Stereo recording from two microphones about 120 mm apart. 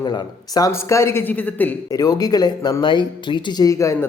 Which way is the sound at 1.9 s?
30° left (ahead or behind).